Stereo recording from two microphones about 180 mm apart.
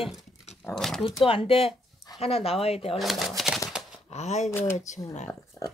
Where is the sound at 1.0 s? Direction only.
30° left (ahead or behind).